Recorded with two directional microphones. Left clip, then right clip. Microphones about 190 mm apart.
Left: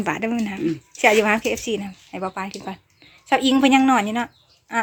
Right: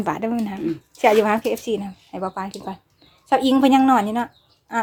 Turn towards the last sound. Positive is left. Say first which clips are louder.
# even
turn(degrees=0)  # may be behind; listen again after turning